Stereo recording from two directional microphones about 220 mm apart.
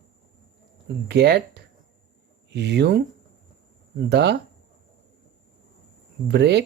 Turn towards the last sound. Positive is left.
turn(degrees=-50)  # may be behind; listen again after turning